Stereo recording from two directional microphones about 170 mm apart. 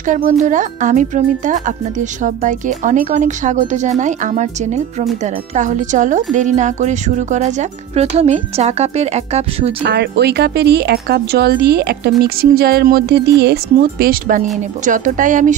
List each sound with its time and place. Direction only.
0.0 s a woman's voice: 50° right (ahead or behind)
9.8 s a woman's voice: 75° right (ahead or behind); by 15.5 s 50° right (ahead or behind)